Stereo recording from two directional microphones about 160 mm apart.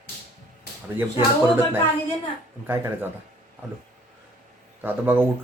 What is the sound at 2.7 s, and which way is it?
Speech, 15° right (ahead or behind).